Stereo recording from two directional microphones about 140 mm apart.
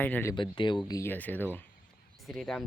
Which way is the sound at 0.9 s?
25° left (ahead or behind).